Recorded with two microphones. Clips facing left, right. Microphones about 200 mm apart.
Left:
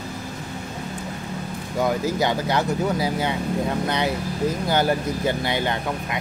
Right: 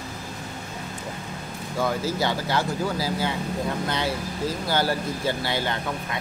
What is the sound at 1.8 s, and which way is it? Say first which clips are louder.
Speech: left 3 dB; 20° left (ahead or behind).